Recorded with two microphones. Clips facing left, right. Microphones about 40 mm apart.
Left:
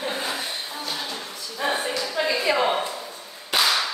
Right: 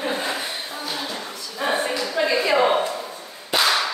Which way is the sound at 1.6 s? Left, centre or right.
Centre.